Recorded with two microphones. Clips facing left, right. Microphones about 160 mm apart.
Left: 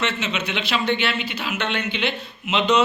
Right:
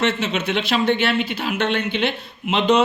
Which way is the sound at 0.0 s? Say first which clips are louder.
Right 4 dB; 50° right (ahead or behind).